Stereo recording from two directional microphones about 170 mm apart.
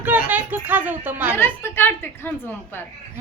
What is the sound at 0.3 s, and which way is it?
Speech, 10° right (ahead or behind).